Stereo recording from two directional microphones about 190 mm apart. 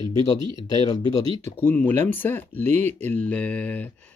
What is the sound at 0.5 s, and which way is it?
Speech, 20° left (ahead or behind).